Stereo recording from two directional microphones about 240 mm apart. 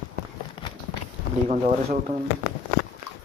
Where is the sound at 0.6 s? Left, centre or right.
Centre.